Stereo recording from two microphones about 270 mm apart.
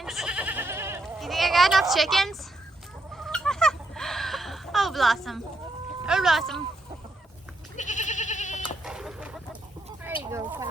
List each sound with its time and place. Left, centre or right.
0.0 s goat: centre
1.0 s a sound: centre
3.2 s fowl: centre
6.1 s speech: centre
7.8 s goat: left
8.8 s fowl: centre
10.2 s speech: centre